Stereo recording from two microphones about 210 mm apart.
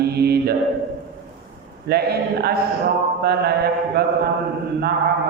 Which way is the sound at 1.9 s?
50° right (ahead or behind).